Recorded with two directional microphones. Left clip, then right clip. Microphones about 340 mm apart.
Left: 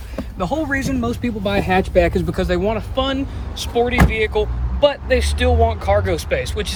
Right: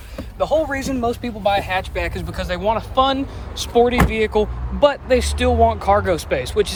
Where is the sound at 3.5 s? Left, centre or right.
Centre.